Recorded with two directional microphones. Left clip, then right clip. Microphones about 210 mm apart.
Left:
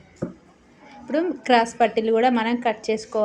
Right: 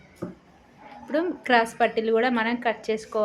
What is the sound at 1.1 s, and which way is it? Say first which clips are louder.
A woman's voice: left 3 dB; 5° left (ahead or behind).